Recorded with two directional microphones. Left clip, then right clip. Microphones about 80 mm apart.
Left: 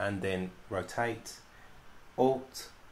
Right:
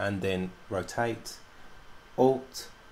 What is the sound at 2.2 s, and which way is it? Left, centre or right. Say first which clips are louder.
Speech: right 4 dB; right.